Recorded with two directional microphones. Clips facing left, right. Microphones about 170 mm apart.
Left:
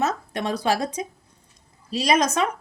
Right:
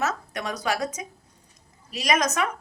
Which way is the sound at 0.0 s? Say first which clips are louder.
Left 3 dB; 30° left (ahead or behind).